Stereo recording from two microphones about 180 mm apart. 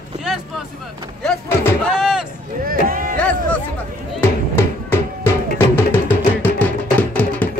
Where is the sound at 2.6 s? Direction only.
50° right (ahead or behind).